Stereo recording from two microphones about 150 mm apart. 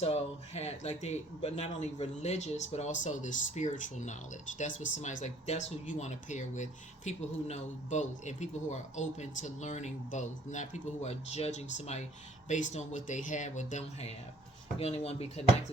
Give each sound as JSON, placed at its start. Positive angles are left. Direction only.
{"t": 0.0, "sound": "speech", "side_deg": 45}